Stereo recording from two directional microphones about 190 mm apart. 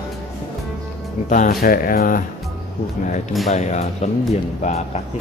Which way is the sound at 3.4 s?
35° left (ahead or behind).